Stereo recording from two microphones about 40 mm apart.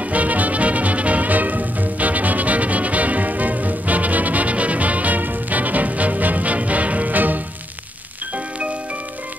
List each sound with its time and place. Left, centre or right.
0.0 s music: right